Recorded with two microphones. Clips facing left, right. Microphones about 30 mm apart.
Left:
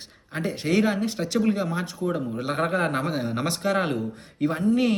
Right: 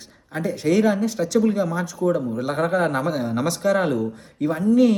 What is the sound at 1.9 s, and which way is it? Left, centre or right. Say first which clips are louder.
Speech: right 6 dB; left.